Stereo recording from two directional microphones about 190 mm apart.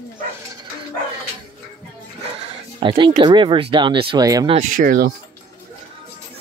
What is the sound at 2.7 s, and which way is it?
Speech, 25° right (ahead or behind).